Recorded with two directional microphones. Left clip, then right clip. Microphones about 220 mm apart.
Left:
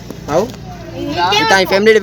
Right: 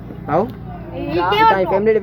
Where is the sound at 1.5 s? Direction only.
50° left (ahead or behind).